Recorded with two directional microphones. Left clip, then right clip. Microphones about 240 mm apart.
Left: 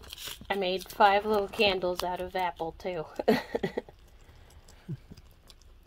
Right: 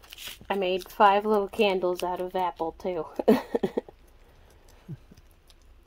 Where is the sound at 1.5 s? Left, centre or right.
Right.